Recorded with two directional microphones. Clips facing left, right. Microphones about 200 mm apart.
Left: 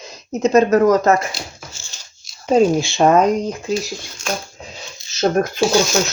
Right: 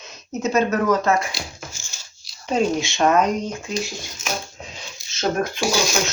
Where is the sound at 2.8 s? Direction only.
35° left (ahead or behind).